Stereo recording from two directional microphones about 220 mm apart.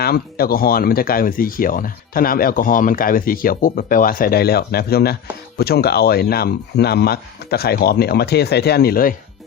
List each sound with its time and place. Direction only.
0.0 s speech: 45° left (ahead or behind)